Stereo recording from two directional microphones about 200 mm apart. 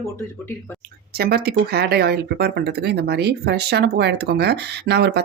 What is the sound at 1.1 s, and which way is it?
Speech, 50° right (ahead or behind).